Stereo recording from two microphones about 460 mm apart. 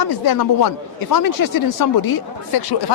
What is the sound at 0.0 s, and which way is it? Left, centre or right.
Speech, left.